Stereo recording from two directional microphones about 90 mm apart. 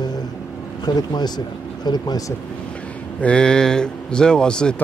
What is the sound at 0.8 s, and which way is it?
Speech, 50° left (ahead or behind).